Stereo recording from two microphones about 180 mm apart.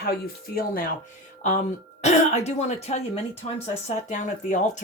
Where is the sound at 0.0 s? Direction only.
60° left (ahead or behind).